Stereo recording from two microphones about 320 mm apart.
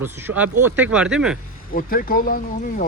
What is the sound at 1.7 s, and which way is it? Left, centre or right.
Speech, left.